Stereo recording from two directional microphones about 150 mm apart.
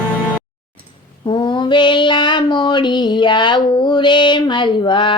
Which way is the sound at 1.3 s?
35° left (ahead or behind).